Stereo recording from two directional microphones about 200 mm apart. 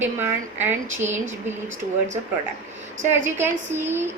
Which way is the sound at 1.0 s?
35° right (ahead or behind).